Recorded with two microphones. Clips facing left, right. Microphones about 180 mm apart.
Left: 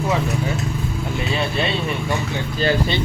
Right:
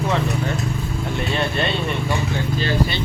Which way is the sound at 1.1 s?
5° left (ahead or behind).